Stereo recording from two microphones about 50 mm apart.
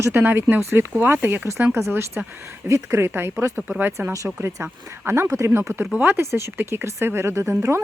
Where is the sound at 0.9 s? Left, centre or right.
Right.